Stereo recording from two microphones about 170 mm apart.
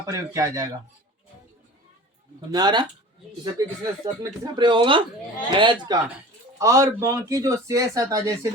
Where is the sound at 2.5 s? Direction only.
25° right (ahead or behind).